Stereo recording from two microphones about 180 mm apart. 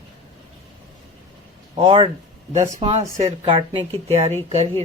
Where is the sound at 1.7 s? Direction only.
30° right (ahead or behind).